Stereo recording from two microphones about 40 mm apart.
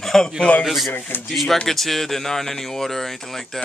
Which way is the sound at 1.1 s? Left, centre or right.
Left.